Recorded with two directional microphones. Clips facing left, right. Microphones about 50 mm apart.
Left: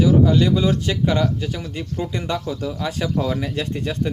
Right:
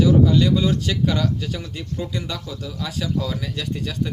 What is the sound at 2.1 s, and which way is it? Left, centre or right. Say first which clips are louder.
Speech: left 5 dB; left.